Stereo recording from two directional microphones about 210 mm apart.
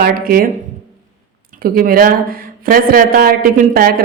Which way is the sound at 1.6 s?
45° right (ahead or behind).